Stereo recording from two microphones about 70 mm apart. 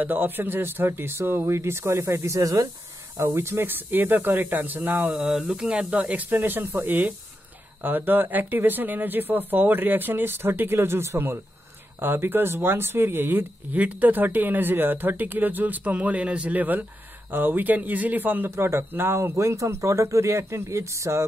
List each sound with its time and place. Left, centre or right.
0.0 s speech: right
3.2 s speech: right
5.1 s speech: centre; by 18.5 s right
18.5 s speech: right